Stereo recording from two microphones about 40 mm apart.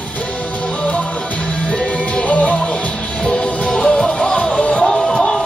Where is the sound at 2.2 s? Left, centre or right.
Left.